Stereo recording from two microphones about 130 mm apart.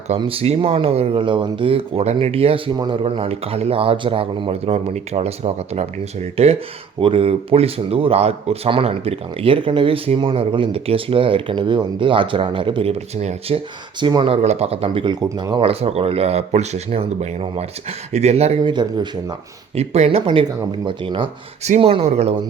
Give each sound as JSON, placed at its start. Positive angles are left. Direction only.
{"t": 0.2, "sound": "speech", "side_deg": -45}
{"t": 14.0, "sound": "speech", "side_deg": -35}
{"t": 14.4, "sound": "speech", "side_deg": -55}
{"t": 15.0, "sound": "speech", "side_deg": -30}
{"t": 15.6, "sound": "speech", "side_deg": -50}
{"t": 18.6, "sound": "speech", "side_deg": -35}
{"t": 19.7, "sound": "speech", "side_deg": -55}